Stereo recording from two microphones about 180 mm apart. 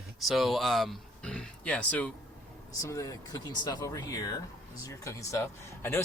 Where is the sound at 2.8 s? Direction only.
20° left (ahead or behind).